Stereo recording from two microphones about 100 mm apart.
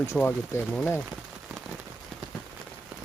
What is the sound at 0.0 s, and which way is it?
Speech, 25° left (ahead or behind).